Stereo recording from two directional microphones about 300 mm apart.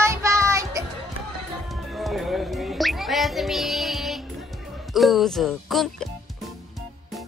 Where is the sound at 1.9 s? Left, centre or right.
Centre.